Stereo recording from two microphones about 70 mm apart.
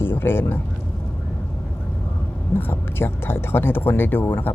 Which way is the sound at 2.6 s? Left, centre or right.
Left.